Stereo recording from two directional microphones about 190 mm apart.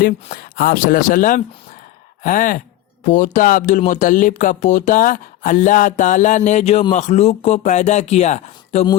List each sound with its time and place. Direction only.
0.0 s speech: 50° left (ahead or behind)